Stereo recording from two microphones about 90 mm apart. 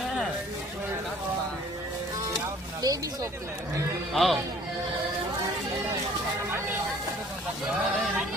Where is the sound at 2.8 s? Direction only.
40° right (ahead or behind).